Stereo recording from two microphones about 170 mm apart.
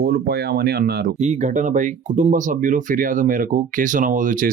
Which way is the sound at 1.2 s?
45° right (ahead or behind).